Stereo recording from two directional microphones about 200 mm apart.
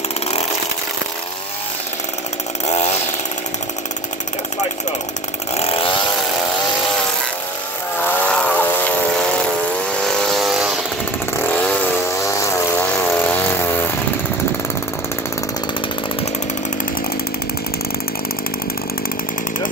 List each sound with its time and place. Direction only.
2.6 s chainsaw: 35° left (ahead or behind)
5.6 s chainsaw: 30° left (ahead or behind)
8.0 s vehicle: 10° left (ahead or behind)